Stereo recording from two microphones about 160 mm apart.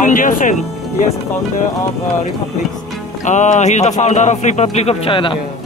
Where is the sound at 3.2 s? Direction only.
50° left (ahead or behind).